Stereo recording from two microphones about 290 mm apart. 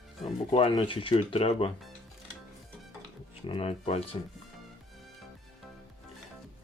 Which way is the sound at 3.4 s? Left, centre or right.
Centre.